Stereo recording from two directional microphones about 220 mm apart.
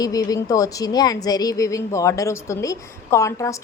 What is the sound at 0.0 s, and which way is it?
A woman's voice, 15° left (ahead or behind).